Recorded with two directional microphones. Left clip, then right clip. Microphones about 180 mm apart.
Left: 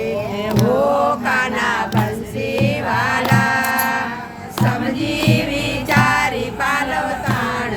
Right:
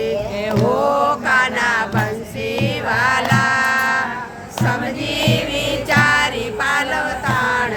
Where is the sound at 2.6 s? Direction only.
30° right (ahead or behind).